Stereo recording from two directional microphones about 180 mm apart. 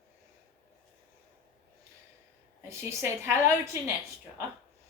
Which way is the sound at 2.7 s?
15° right (ahead or behind).